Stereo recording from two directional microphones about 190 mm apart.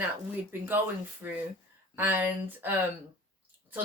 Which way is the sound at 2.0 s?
10° right (ahead or behind).